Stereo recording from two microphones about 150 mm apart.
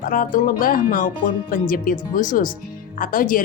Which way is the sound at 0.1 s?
65° left (ahead or behind).